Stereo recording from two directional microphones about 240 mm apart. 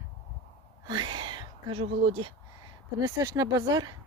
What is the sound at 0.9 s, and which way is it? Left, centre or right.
Gasp, centre.